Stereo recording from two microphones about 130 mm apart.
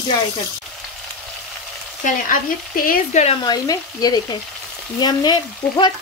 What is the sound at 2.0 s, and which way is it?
Speech, 90° left.